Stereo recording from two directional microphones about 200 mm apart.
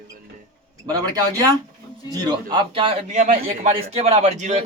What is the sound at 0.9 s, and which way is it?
Speech, 20° right (ahead or behind).